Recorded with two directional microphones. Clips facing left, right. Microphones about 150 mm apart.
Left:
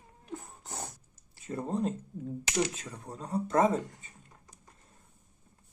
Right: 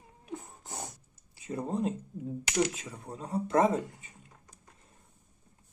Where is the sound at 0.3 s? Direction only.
15° right (ahead or behind).